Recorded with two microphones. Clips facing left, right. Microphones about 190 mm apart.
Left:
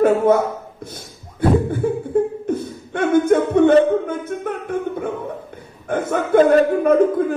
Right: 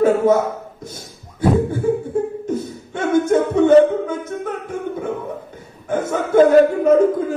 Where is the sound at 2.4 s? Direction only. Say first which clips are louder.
Left 1 dB; 60° left (ahead or behind).